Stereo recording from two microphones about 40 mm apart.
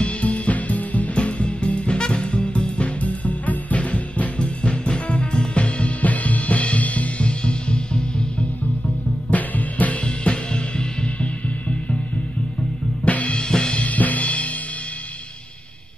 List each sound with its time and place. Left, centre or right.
0.0 s music: left
7.2 s music: left
9.3 s music: left
10.0 s music: left
13.0 s drum kit: left
13.4 s drum kit: centre
13.7 s drum kit: left